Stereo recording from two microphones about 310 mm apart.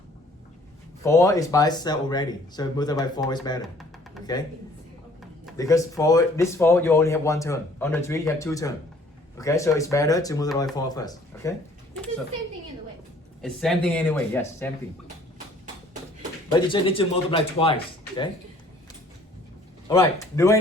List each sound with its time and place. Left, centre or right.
1.0 s speech: centre
5.5 s speech: centre
13.4 s speech: centre
16.5 s speech: centre
19.9 s speech: centre